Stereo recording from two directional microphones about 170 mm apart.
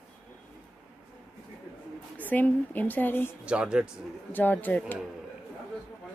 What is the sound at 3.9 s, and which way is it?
Speech, 10° left (ahead or behind).